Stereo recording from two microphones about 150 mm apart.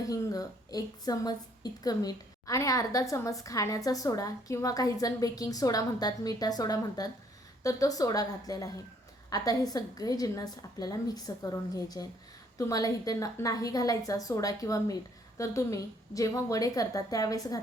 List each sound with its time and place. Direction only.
0.1 s a woman's voice: 25° left (ahead or behind)